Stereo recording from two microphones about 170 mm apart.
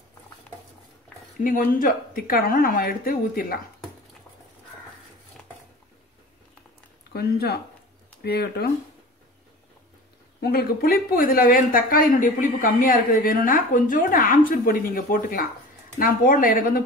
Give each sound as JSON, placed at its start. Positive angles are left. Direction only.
{"t": 1.4, "sound": "speech", "side_deg": 55}
{"t": 7.1, "sound": "speech", "side_deg": 65}
{"t": 10.4, "sound": "speech", "side_deg": 65}